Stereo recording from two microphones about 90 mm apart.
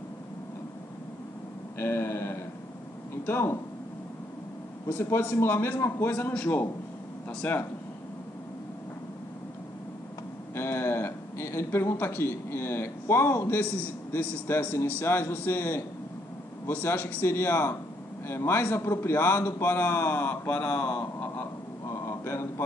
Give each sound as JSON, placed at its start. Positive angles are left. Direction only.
{"t": 1.8, "sound": "a man's voice", "side_deg": 25}
{"t": 4.8, "sound": "a man's voice", "side_deg": 25}
{"t": 6.1, "sound": "a man's voice", "side_deg": 15}
{"t": 10.5, "sound": "a man's voice", "side_deg": 30}
{"t": 13.6, "sound": "a man's voice", "side_deg": 20}
{"t": 22.0, "sound": "a sound", "side_deg": 30}